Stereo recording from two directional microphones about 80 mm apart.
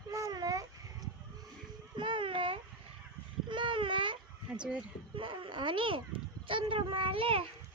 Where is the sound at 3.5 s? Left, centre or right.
Right.